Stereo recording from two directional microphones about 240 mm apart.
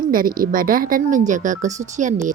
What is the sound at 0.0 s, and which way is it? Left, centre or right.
Speech, right.